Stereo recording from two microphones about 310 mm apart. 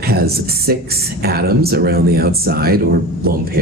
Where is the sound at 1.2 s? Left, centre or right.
Right.